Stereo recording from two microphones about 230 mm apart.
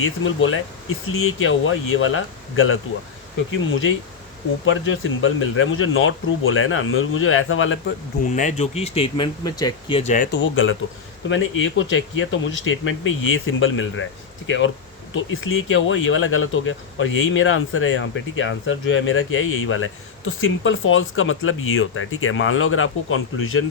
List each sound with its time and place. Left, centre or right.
0.0 s speech: left
8.3 s speech: left
10.0 s speech: left
10.3 s speech: left